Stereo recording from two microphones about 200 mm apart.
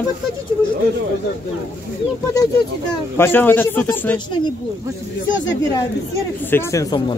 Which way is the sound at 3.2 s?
10° left (ahead or behind).